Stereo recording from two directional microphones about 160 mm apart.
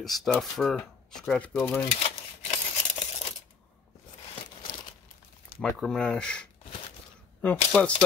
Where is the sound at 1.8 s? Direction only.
40° left (ahead or behind).